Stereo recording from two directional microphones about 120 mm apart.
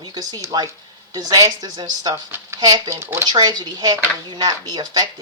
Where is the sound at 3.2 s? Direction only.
35° right (ahead or behind).